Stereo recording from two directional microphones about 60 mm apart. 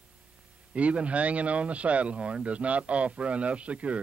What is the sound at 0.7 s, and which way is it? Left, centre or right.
Speech, right.